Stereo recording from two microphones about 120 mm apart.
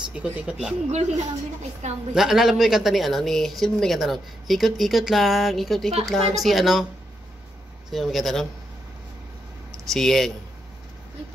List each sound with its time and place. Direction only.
0.1 s speech: 5° right (ahead or behind)
0.9 s a woman's voice: 70° right (ahead or behind)
2.1 s speech: 5° right (ahead or behind)
7.9 s speech: centre (ahead or behind)
9.8 s speech: centre (ahead or behind)